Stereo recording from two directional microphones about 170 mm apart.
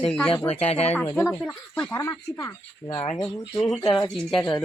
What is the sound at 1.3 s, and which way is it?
Speech, 10° left (ahead or behind).